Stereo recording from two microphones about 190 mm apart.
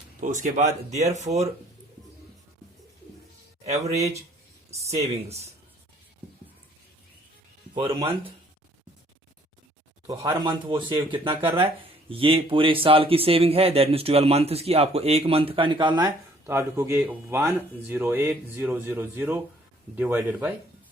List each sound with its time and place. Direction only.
0.2 s speech: 40° right (ahead or behind)
3.6 s speech: 35° right (ahead or behind)
7.7 s speech: 25° right (ahead or behind)
10.1 s speech: 20° right (ahead or behind)
16.5 s speech: 15° right (ahead or behind)